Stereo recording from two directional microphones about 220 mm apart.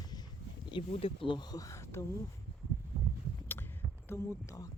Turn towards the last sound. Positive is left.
turn(degrees=10)  # may be behind; listen again after turning